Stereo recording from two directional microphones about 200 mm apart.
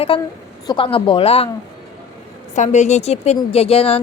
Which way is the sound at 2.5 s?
35° left (ahead or behind).